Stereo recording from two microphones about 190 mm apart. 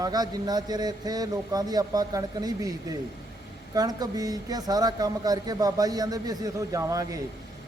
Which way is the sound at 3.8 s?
20° right (ahead or behind).